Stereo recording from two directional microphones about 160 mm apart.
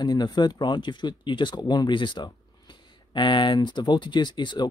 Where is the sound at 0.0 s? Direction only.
25° left (ahead or behind).